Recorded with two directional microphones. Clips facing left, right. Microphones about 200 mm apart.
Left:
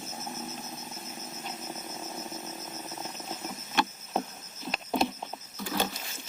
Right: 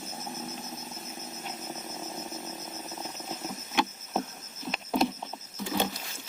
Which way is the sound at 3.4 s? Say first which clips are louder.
Right 1 dB; centre (ahead or behind).